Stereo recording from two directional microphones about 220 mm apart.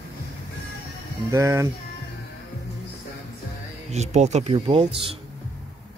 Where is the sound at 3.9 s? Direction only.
30° right (ahead or behind).